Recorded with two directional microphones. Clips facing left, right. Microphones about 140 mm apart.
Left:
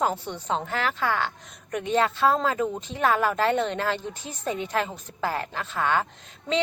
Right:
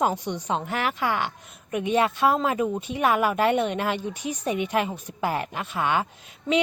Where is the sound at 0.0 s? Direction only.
15° right (ahead or behind).